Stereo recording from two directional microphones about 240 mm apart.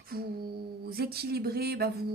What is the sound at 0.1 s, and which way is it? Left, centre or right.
A woman's voice, right.